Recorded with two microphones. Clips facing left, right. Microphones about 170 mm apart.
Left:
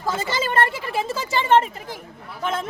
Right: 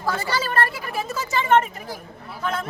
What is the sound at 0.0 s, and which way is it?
Speech, 20° left (ahead or behind).